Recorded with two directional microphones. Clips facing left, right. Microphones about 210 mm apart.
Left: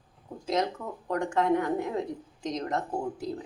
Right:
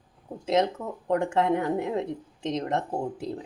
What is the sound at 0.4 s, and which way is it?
Speech, 25° right (ahead or behind).